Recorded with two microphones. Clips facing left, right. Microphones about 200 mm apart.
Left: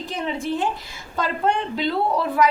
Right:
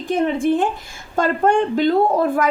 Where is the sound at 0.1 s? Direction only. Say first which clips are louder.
Right 9 dB; 50° right (ahead or behind).